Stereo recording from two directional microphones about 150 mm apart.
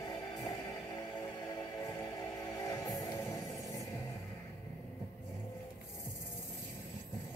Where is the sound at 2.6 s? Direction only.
25° left (ahead or behind).